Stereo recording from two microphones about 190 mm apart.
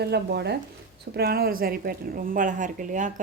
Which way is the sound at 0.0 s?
60° right (ahead or behind).